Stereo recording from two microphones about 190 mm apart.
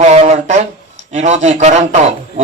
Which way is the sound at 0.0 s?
35° right (ahead or behind).